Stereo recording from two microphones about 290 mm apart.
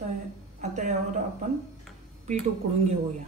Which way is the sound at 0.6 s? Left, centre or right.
Right.